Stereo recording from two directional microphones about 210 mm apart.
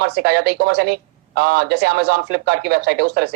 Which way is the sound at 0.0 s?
50° right (ahead or behind).